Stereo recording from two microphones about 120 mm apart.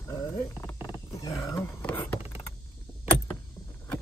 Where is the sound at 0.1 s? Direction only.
30° left (ahead or behind).